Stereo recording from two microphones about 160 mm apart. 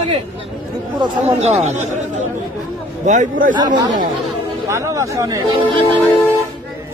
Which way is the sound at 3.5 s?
25° right (ahead or behind).